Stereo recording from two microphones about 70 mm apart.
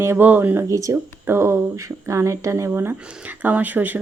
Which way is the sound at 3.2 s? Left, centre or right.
Right.